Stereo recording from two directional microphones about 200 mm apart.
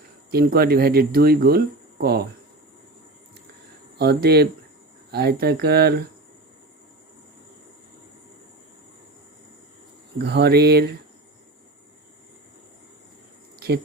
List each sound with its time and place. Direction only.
0.3 s speech: 50° right (ahead or behind)
3.9 s speech: 55° right (ahead or behind)
10.2 s speech: 55° right (ahead or behind)